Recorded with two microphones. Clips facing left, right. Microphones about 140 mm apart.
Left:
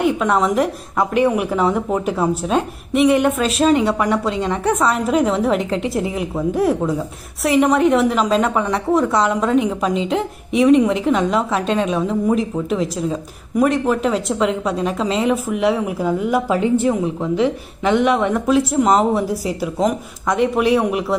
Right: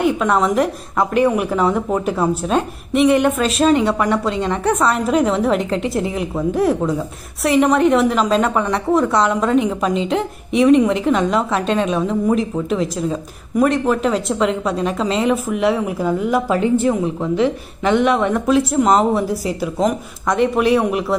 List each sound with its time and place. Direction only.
0.0 s a woman's voice: 15° left (ahead or behind)